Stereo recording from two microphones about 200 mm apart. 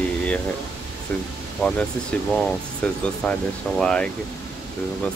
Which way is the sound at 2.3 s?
5° left (ahead or behind).